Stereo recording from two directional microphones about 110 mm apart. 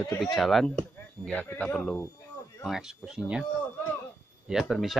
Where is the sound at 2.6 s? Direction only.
5° right (ahead or behind).